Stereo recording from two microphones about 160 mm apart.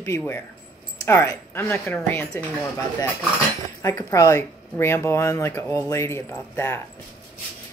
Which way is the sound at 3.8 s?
20° left (ahead or behind).